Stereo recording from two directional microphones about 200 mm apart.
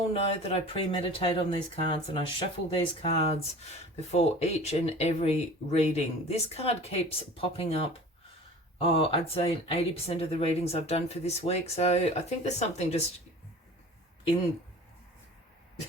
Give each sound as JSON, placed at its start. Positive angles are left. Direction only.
{"t": 0.1, "sound": "speech", "side_deg": 30}